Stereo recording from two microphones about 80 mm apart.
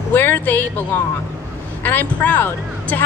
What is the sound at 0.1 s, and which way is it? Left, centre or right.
Speech, left.